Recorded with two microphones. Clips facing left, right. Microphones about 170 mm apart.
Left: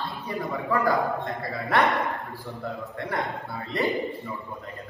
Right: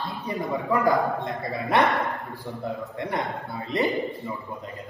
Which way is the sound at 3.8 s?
Centre (ahead or behind).